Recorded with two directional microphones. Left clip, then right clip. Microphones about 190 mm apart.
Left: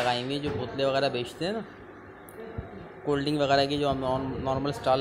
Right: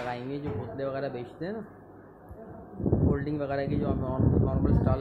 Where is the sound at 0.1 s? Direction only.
20° left (ahead or behind).